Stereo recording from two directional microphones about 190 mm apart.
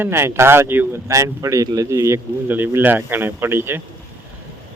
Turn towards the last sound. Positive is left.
turn(degrees=-10)  # may be behind; listen again after turning